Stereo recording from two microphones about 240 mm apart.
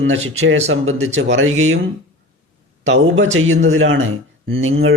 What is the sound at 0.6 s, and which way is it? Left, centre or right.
Speech, right.